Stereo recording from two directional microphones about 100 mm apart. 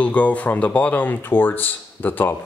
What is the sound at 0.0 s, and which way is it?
Speech, 15° left (ahead or behind).